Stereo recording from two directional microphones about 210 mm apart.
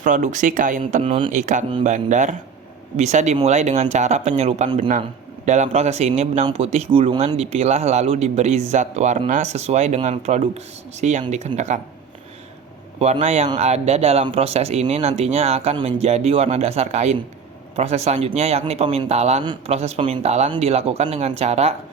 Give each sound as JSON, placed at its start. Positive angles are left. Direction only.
{"t": 0.0, "sound": "speech", "side_deg": -35}
{"t": 1.3, "sound": "speech", "side_deg": -35}
{"t": 13.0, "sound": "speech", "side_deg": -30}